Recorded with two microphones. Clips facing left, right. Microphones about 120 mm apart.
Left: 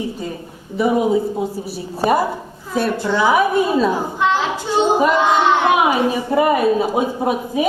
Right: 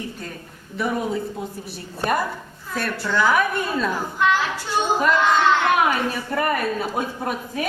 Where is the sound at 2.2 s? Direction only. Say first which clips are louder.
Left 6 dB; 20° left (ahead or behind).